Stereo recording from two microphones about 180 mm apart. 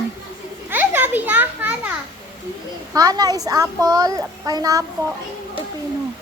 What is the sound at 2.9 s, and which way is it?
A child's voice, 20° right (ahead or behind).